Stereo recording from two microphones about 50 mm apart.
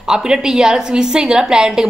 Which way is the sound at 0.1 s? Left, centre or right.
Centre.